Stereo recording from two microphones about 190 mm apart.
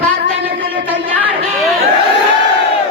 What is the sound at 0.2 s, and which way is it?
Music, 60° right (ahead or behind).